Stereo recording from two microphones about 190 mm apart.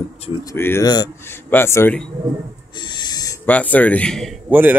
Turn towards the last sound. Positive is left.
turn(degrees=-10)  # may be behind; listen again after turning